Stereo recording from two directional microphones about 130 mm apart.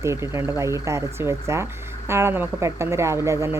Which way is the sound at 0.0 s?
20° right (ahead or behind).